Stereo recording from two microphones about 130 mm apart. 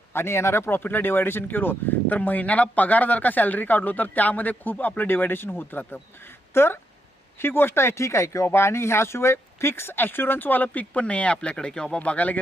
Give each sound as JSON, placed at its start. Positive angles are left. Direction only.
{"t": 0.1, "sound": "speech", "side_deg": 20}